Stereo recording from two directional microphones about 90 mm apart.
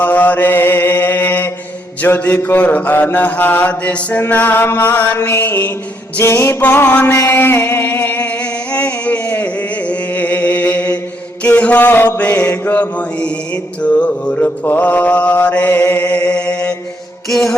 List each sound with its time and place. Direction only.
0.0 s mantra: 20° left (ahead or behind)
7.1 s a sound: 30° left (ahead or behind)
11.4 s mantra: 15° left (ahead or behind)